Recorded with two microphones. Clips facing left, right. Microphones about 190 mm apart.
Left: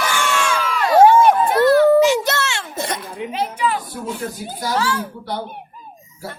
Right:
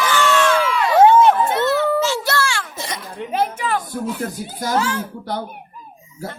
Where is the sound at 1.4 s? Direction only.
25° right (ahead or behind).